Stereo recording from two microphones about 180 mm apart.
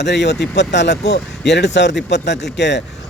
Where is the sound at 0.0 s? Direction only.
75° left (ahead or behind).